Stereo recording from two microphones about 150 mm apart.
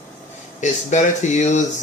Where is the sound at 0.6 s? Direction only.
50° left (ahead or behind).